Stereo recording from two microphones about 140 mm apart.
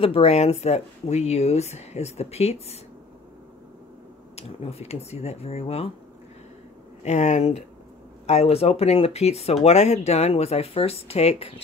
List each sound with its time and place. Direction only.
0.0 s speech: 45° left (ahead or behind)
4.4 s speech: 50° left (ahead or behind)
7.1 s speech: 55° left (ahead or behind)